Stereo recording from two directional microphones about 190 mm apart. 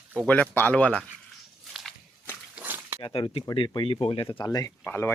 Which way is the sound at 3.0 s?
30° left (ahead or behind).